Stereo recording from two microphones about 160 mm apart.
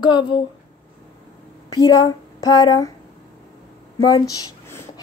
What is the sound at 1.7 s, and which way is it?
Speech, 25° left (ahead or behind).